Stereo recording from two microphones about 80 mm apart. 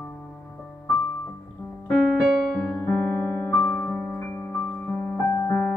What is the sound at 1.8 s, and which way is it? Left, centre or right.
Piano, centre.